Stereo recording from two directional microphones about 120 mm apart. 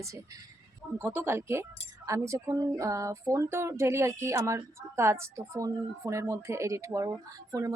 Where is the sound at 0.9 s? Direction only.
20° right (ahead or behind).